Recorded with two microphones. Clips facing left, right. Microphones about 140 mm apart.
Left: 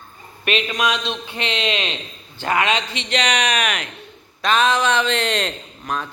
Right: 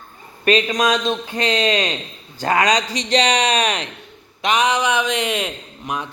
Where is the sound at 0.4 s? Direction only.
40° right (ahead or behind).